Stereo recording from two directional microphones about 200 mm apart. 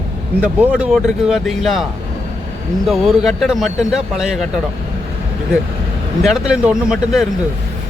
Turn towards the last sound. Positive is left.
turn(degrees=-5)  # may be behind; listen again after turning